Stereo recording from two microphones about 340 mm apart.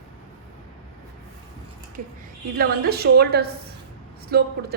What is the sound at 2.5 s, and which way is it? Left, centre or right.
A woman's voice, right.